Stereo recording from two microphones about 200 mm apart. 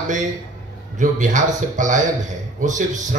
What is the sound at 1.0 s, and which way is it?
A man's voice, 40° right (ahead or behind).